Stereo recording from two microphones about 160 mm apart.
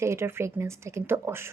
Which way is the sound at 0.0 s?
15° right (ahead or behind).